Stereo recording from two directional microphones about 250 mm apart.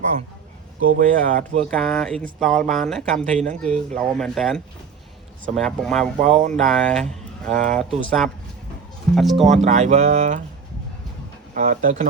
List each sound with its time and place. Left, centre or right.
0.9 s speech: right
1.6 s speech: centre
6.1 s speech: right
6.5 s speech: centre
9.5 s speech: right
11.5 s speech: right